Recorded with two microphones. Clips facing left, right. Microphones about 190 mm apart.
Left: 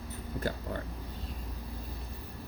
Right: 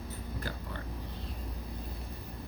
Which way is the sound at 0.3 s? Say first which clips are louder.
Left 8 dB; 45° left (ahead or behind).